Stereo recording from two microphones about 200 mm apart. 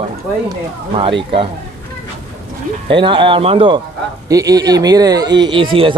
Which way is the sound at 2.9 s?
25° right (ahead or behind).